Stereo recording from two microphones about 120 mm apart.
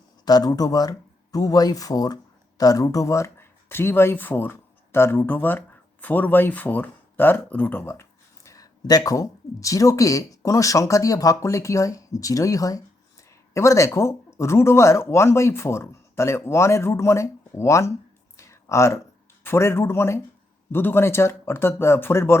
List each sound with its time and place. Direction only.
0.3 s speech: 35° left (ahead or behind)
8.4 s speech: 30° left (ahead or behind)
18.3 s a sound: 25° left (ahead or behind)
19.5 s speech: 20° left (ahead or behind)